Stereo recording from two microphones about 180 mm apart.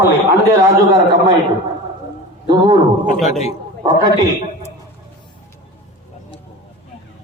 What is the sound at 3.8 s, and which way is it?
Speech, 20° right (ahead or behind).